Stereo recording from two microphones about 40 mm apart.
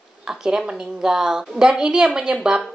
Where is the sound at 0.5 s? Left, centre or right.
Centre.